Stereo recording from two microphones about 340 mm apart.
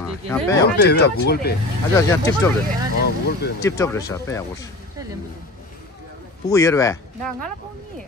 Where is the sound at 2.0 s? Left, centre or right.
Centre.